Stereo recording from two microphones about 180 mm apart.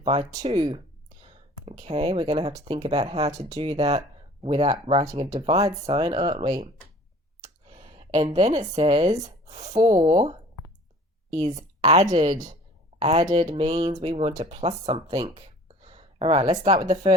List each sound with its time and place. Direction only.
0.0 s speech: 30° right (ahead or behind)
1.8 s speech: 35° right (ahead or behind)
7.7 s a sound: 30° right (ahead or behind)
8.7 s speech: 35° right (ahead or behind)
11.3 s speech: 35° right (ahead or behind)